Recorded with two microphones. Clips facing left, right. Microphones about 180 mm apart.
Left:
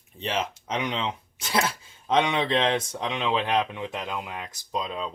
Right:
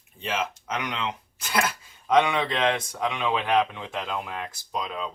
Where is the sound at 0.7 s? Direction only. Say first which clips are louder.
Left 2 dB; 30° left (ahead or behind).